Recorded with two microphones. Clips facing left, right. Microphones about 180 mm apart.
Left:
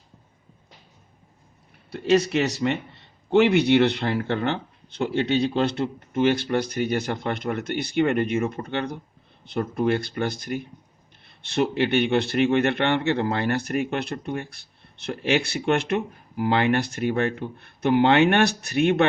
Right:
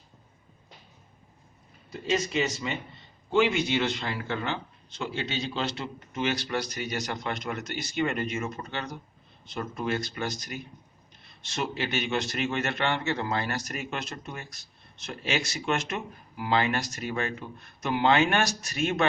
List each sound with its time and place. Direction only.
1.9 s a man's voice: 70° left (ahead or behind)